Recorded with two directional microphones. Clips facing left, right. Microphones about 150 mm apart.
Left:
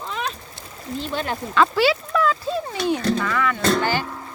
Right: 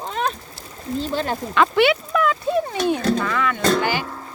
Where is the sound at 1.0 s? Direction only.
35° right (ahead or behind).